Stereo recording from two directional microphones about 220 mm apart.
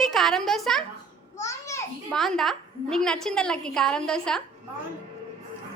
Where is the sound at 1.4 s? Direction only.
15° left (ahead or behind).